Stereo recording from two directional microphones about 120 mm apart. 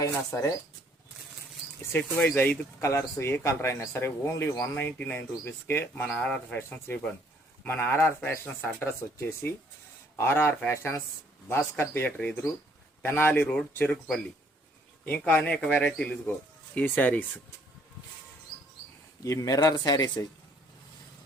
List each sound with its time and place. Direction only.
0.0 s speech: 25° left (ahead or behind)
1.9 s speech: 15° left (ahead or behind)
19.2 s speech: 30° left (ahead or behind)